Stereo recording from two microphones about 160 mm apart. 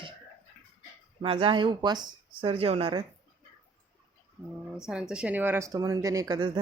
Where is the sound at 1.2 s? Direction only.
35° right (ahead or behind).